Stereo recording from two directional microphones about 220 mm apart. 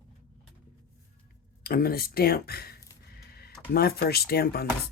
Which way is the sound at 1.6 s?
45° left (ahead or behind).